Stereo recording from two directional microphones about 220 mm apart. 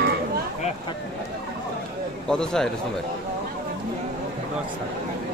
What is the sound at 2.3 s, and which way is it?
Speech, 5° left (ahead or behind).